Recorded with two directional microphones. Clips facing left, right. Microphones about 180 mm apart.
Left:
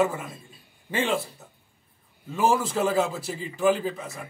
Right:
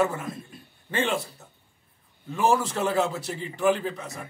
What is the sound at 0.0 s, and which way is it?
A man's voice, 10° left (ahead or behind).